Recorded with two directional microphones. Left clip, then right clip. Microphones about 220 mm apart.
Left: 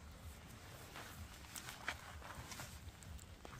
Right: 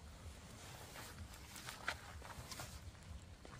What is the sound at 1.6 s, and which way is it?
Walk, 20° right (ahead or behind).